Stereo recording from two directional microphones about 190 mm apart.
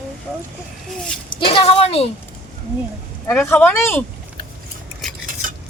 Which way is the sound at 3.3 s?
10° left (ahead or behind).